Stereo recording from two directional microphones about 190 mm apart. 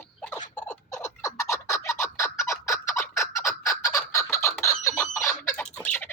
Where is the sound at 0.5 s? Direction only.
10° left (ahead or behind).